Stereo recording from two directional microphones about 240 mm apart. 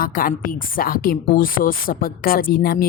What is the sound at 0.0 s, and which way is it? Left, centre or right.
Speech, left.